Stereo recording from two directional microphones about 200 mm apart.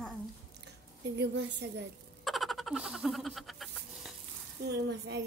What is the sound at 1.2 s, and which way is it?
Speech, 60° right (ahead or behind).